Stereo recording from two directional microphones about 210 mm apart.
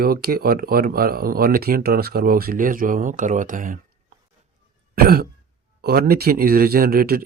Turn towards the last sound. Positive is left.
turn(degrees=-45)  # may be behind; listen again after turning